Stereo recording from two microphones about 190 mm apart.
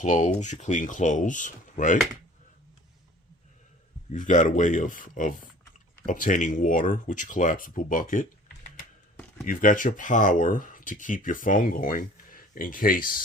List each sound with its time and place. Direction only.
0.0 s speech: 40° left (ahead or behind)
4.1 s speech: 40° left (ahead or behind)